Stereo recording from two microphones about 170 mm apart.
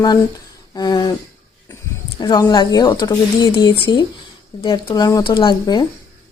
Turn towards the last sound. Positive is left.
turn(degrees=25)  # may be behind; listen again after turning